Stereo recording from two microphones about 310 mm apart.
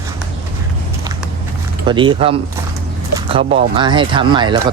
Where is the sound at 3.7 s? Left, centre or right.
Centre.